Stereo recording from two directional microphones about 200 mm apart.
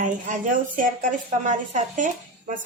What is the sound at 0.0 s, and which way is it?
A woman's voice, 40° right (ahead or behind).